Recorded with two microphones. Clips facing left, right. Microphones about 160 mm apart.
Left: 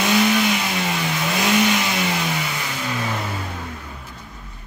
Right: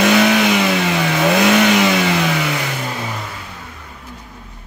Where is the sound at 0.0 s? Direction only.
85° right.